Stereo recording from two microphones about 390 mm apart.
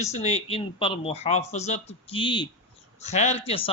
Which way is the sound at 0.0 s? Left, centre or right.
Centre.